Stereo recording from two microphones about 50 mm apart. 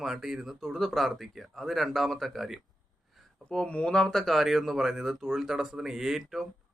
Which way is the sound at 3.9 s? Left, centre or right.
Centre.